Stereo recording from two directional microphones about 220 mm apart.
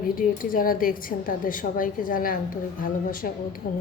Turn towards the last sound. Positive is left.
turn(degrees=40)  # may be behind; listen again after turning